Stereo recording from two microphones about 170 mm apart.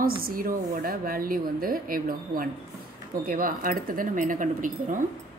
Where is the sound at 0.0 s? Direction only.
60° right (ahead or behind).